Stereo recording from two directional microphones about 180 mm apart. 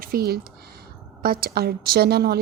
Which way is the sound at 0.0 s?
55° right (ahead or behind).